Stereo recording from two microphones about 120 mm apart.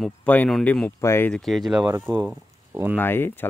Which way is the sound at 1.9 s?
20° right (ahead or behind).